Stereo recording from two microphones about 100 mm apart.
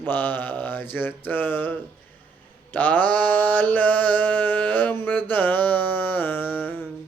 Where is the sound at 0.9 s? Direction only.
20° left (ahead or behind).